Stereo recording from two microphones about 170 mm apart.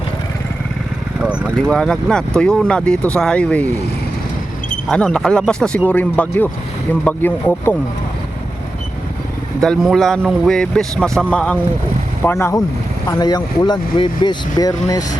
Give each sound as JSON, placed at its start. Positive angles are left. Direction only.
{"t": 1.2, "sound": "vehicle", "side_deg": -10}
{"t": 1.6, "sound": "a man's voice", "side_deg": 5}
{"t": 4.9, "sound": "a man's voice", "side_deg": 5}
{"t": 9.6, "sound": "a man's voice", "side_deg": 0}